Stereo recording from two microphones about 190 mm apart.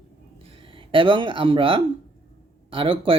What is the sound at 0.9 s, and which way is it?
Speech, 25° right (ahead or behind).